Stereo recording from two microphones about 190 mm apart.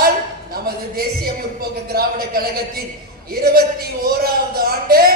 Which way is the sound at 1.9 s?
55° right (ahead or behind).